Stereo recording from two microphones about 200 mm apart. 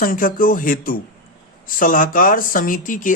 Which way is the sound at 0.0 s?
45° left (ahead or behind).